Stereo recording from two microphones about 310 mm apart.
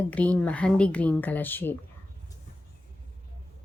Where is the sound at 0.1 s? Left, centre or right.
Centre.